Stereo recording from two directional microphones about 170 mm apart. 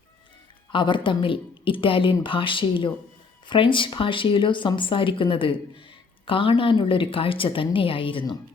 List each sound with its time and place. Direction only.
0.7 s a woman's voice: 30° left (ahead or behind)